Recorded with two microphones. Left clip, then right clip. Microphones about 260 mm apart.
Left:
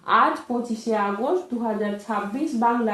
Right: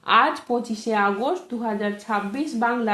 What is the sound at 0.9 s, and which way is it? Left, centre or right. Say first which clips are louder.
A woman's voice: right 2 dB; right.